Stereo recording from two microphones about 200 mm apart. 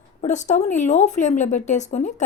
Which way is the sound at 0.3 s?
35° left (ahead or behind).